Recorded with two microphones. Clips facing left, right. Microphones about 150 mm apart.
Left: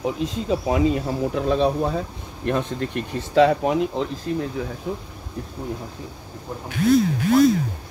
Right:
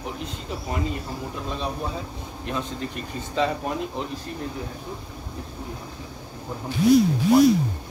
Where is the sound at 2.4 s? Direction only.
60° left (ahead or behind); by 4.0 s 90° left.